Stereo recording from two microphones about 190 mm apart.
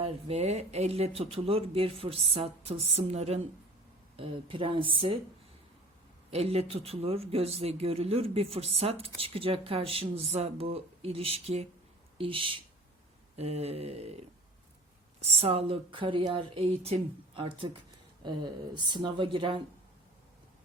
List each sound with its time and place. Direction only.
0.0 s a woman's voice: 35° right (ahead or behind)
6.3 s a woman's voice: 35° right (ahead or behind)